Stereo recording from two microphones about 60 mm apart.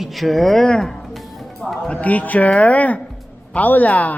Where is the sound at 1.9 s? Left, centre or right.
Left.